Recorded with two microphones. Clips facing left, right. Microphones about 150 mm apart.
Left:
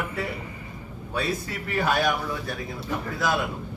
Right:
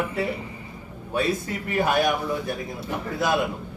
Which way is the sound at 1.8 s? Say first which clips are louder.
Right 2 dB; 20° right (ahead or behind).